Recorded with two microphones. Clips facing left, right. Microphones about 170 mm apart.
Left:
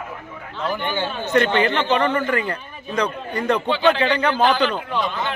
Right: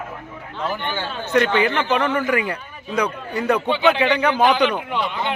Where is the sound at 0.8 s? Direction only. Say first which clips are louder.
Left 2 dB; 15° left (ahead or behind).